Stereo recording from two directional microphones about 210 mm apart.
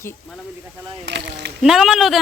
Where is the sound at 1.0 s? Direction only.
55° right (ahead or behind).